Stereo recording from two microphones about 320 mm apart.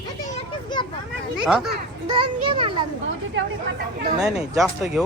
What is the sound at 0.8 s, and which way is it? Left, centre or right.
Speech, centre.